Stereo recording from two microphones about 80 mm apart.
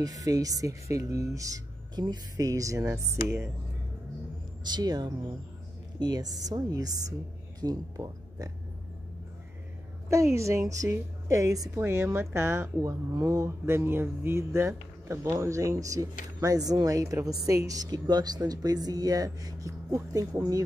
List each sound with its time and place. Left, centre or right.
0.0 s speech: right
4.6 s speech: right
10.0 s a woman's voice: right
11.8 s a woman's voice: right
13.1 s speech: right
13.7 s speech: right